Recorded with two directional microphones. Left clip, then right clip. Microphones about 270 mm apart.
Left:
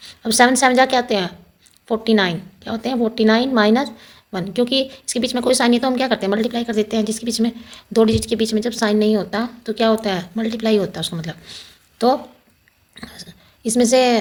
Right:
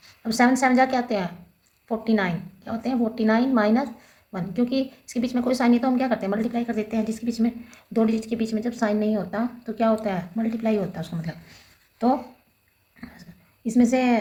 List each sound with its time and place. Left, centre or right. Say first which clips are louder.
0.0 s a woman's voice: left 7 dB; left
13.7 s a woman's voice: left 7 dB; left